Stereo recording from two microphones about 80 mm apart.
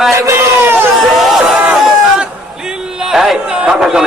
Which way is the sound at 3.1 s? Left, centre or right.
Centre.